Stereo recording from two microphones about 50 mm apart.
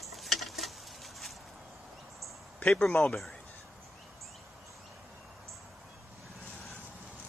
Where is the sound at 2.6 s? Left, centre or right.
Left.